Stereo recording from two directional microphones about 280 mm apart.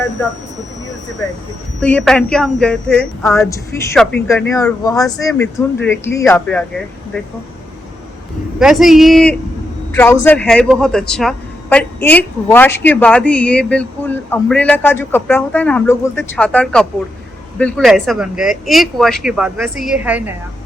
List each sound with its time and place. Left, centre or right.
1.8 s a woman's voice: centre
8.5 s speech: centre